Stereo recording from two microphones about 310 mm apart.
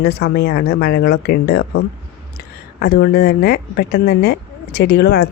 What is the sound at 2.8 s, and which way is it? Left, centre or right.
A woman's voice, left.